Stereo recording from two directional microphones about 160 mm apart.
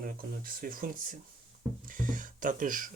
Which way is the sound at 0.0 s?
60° right (ahead or behind).